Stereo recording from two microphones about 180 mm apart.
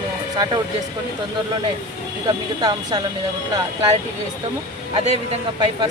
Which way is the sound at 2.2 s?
20° right (ahead or behind).